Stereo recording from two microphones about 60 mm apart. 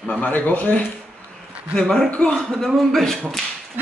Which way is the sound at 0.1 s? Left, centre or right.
Left.